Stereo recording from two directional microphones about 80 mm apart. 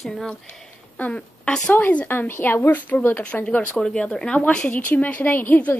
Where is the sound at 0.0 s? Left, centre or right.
Centre.